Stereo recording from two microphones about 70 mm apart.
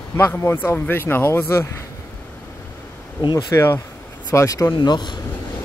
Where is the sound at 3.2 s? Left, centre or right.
Left.